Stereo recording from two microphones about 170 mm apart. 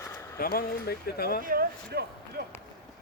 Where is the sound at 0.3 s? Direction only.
60° left (ahead or behind).